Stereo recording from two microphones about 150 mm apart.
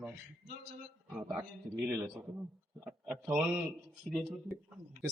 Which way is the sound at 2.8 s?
5° right (ahead or behind).